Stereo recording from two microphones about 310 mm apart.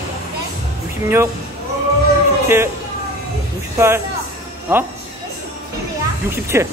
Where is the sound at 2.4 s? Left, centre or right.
Centre.